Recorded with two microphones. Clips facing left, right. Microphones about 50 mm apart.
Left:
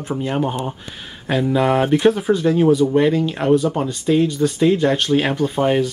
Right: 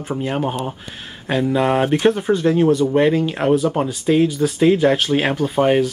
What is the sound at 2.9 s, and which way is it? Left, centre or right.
Speech, centre.